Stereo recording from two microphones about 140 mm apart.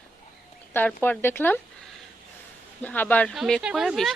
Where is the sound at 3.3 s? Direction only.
Centre (ahead or behind).